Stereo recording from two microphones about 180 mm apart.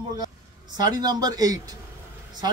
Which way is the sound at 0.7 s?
25° right (ahead or behind).